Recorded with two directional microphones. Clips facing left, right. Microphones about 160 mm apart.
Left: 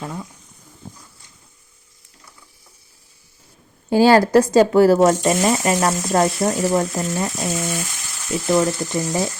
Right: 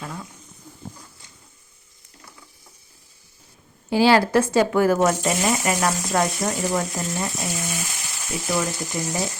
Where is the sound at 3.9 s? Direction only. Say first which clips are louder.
Left 4 dB; 45° left (ahead or behind).